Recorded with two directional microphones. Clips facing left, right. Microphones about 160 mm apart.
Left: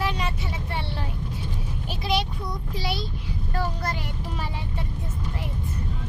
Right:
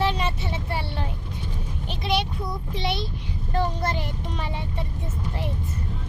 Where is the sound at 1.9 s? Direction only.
Centre (ahead or behind).